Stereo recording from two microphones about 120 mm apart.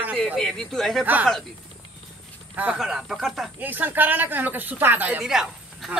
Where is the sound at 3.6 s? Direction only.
15° right (ahead or behind).